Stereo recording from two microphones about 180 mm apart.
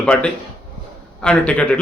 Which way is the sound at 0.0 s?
5° left (ahead or behind).